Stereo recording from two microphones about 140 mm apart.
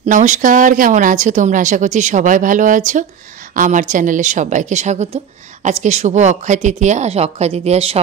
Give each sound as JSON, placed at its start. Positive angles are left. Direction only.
{"t": 0.0, "sound": "a woman's voice", "side_deg": -60}